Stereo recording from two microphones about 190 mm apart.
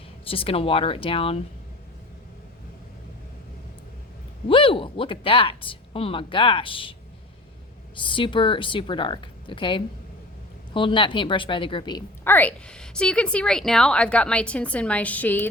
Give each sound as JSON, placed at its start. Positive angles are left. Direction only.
{"t": 0.3, "sound": "speech", "side_deg": 30}
{"t": 4.4, "sound": "speech", "side_deg": 25}
{"t": 8.0, "sound": "speech", "side_deg": 25}
{"t": 12.2, "sound": "a woman's voice", "side_deg": 10}